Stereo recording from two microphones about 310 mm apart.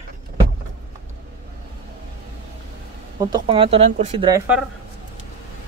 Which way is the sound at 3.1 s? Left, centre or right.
Centre.